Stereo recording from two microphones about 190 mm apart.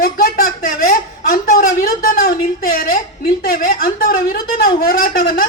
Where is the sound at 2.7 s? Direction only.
50° left (ahead or behind).